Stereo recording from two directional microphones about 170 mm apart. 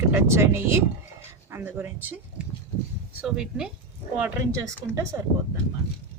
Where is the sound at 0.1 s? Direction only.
15° right (ahead or behind).